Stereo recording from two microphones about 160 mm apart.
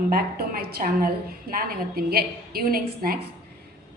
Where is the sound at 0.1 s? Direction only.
70° right (ahead or behind).